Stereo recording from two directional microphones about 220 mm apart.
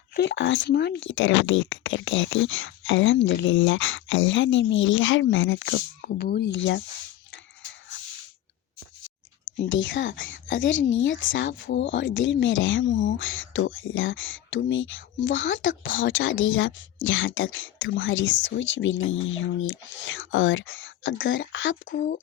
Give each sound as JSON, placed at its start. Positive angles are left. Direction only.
{"t": 0.2, "sound": "speech", "side_deg": 55}
{"t": 9.6, "sound": "speech", "side_deg": 60}